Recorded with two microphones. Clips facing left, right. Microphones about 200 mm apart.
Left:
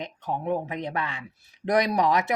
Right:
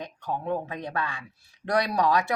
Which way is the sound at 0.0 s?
20° left (ahead or behind).